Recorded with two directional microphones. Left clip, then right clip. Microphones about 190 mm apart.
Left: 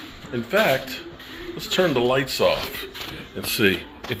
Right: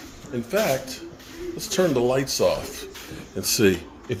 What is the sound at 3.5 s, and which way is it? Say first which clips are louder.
Speech: even; 40° right (ahead or behind).